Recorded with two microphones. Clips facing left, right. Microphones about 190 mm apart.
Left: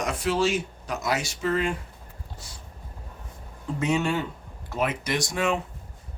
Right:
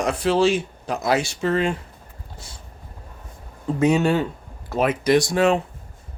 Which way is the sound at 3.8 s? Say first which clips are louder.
Right 7 dB; 35° right (ahead or behind).